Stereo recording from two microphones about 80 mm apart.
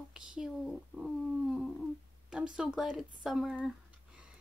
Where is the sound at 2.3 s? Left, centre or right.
Centre.